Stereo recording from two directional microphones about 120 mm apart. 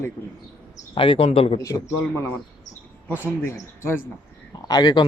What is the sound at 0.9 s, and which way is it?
Speech, 45° left (ahead or behind).